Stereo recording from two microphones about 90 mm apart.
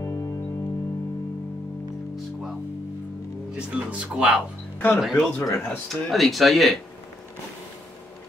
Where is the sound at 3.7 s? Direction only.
15° right (ahead or behind).